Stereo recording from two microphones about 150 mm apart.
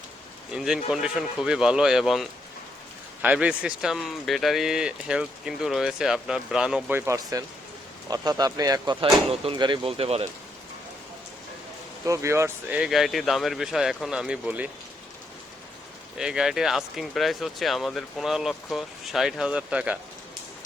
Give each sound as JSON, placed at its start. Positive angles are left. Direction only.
{"t": 0.5, "sound": "speech", "side_deg": -5}
{"t": 12.0, "sound": "speech", "side_deg": -20}
{"t": 12.7, "sound": "speech", "side_deg": -5}
{"t": 16.1, "sound": "speech", "side_deg": -5}